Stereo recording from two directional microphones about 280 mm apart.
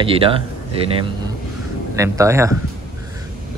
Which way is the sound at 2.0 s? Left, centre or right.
Centre.